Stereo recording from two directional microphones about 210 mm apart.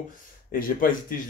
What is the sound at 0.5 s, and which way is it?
Speech, 40° left (ahead or behind).